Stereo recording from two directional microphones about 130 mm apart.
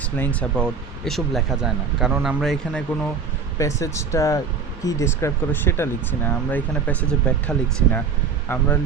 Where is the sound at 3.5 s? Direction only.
25° left (ahead or behind).